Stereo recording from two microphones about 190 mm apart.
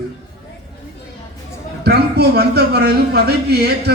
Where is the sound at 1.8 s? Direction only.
60° right (ahead or behind).